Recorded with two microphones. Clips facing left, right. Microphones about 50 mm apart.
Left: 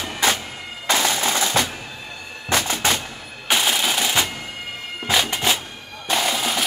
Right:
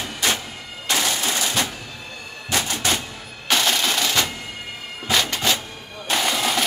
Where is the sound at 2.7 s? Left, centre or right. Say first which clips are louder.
Left 2 dB; left.